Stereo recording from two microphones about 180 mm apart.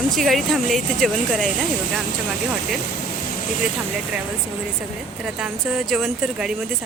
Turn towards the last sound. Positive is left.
turn(degrees=0)  # may be behind; listen again after turning